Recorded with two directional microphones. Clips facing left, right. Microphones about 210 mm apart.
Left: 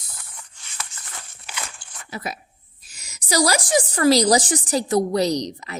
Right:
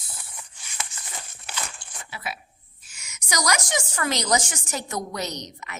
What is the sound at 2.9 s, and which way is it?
A woman's voice, 35° left (ahead or behind).